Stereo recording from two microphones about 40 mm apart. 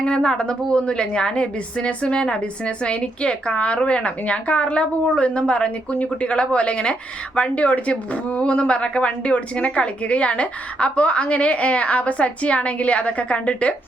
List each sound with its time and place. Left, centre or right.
0.0 s a woman's voice: left